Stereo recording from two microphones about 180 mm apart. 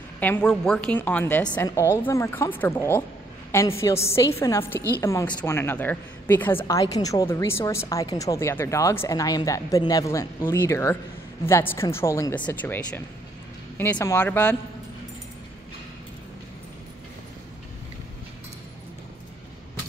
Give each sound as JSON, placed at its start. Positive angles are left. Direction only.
{"t": 0.2, "sound": "a woman's voice", "side_deg": 5}